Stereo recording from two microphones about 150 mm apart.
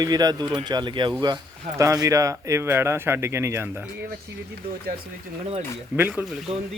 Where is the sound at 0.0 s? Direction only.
25° right (ahead or behind).